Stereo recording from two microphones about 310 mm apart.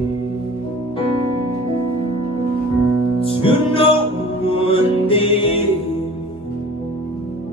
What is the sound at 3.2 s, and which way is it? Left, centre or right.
Music, centre.